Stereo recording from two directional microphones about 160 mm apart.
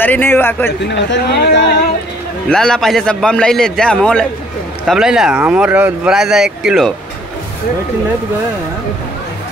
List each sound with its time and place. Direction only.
0.0 s speech: 10° left (ahead or behind)
0.7 s speech: 90° left
2.5 s speech: 5° left (ahead or behind)